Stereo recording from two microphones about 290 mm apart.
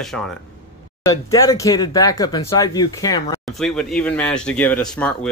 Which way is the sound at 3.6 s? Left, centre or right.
Centre.